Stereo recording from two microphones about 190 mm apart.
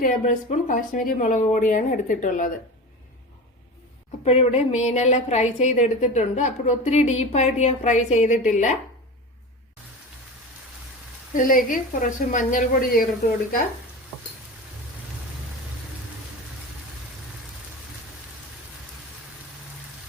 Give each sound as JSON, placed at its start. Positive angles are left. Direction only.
{"t": 0.0, "sound": "a woman's voice", "side_deg": 40}
{"t": 4.2, "sound": "a woman's voice", "side_deg": 30}
{"t": 11.3, "sound": "a woman's voice", "side_deg": 45}